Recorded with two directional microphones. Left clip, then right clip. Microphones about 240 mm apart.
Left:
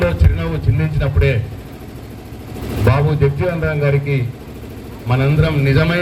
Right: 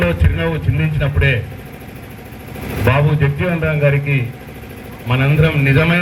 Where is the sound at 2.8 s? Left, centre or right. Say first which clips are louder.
Even; left.